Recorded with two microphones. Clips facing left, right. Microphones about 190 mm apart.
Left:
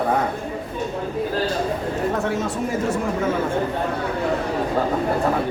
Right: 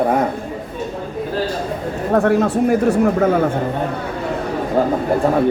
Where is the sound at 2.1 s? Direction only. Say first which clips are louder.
Right 9 dB; 60° right (ahead or behind).